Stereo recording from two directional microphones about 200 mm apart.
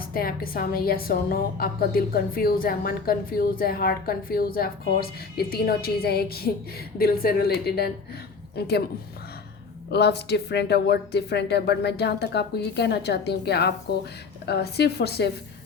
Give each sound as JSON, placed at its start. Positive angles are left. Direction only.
{"t": 0.1, "sound": "a woman's voice", "side_deg": 45}
{"t": 9.9, "sound": "speech", "side_deg": 55}